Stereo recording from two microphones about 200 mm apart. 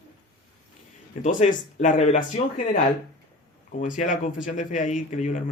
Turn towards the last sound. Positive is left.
turn(degrees=35)  # may be behind; listen again after turning